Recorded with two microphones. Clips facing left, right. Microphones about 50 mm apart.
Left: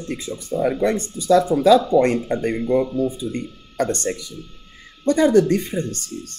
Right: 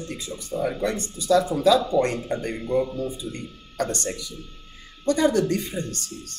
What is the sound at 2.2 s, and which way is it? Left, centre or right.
Speech, left.